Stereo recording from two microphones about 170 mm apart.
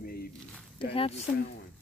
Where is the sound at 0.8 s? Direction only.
35° left (ahead or behind).